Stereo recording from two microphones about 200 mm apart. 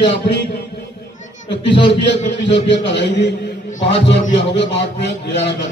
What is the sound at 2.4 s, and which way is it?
A man's voice, 60° left (ahead or behind).